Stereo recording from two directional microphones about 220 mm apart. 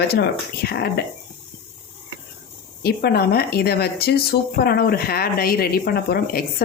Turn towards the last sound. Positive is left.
turn(degrees=45)  # may be behind; listen again after turning